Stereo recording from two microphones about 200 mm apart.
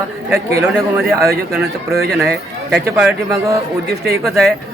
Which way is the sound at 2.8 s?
10° right (ahead or behind).